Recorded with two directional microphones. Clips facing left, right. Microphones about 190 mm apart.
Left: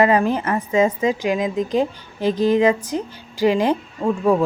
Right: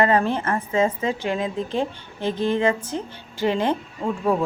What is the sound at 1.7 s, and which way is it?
A woman's voice, 25° right (ahead or behind).